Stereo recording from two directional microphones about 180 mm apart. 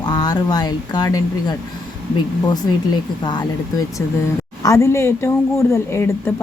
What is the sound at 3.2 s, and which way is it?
Speech, 25° left (ahead or behind).